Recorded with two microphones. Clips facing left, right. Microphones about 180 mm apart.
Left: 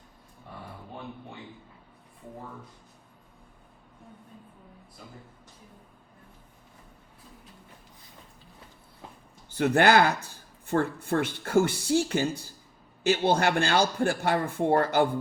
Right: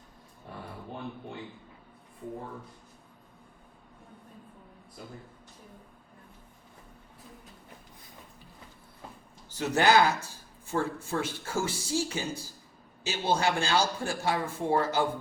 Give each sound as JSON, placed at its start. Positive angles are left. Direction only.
{"t": 9.5, "sound": "speech", "side_deg": 55}